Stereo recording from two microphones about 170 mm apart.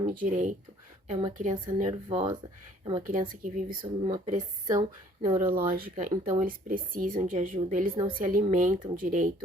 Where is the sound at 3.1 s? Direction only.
50° right (ahead or behind).